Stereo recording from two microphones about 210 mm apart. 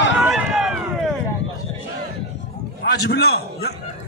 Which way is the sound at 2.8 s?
50° left (ahead or behind).